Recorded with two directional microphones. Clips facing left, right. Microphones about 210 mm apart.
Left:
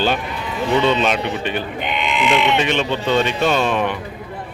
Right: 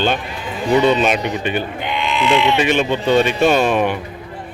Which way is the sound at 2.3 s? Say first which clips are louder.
Right 3 dB; 5° right (ahead or behind).